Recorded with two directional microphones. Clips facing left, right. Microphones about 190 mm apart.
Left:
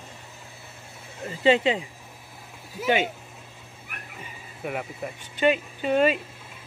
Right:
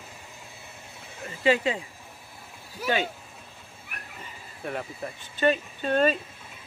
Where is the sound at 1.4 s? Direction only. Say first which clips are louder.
Left 3 dB; 25° left (ahead or behind).